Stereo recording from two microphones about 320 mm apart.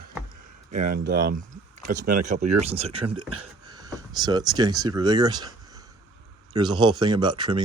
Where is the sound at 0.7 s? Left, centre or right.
Right.